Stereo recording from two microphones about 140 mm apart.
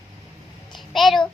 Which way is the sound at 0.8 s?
Centre (ahead or behind).